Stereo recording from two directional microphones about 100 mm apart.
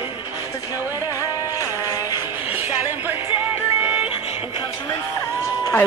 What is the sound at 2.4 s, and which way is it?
Music, 20° right (ahead or behind).